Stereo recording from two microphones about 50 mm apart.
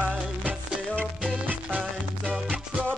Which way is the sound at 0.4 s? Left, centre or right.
Right.